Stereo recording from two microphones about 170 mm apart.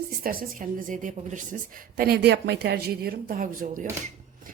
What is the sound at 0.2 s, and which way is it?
A woman's voice, 55° right (ahead or behind).